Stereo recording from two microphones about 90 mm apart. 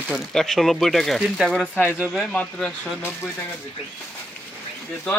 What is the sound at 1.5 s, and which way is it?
Speech, 15° left (ahead or behind).